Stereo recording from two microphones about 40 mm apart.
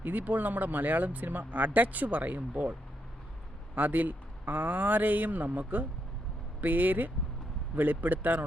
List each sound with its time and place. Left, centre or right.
0.0 s speech: right
3.8 s speech: right